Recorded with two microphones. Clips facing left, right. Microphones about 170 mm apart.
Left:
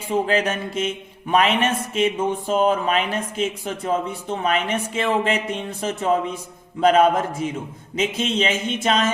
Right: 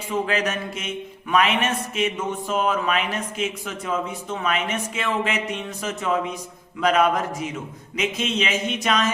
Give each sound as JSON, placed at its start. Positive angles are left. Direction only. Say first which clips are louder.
{"t": 0.1, "sound": "speech", "louder": "left 3 dB", "side_deg": 30}